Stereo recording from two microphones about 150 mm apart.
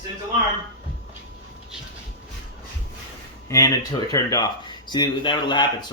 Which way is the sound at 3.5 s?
25° left (ahead or behind).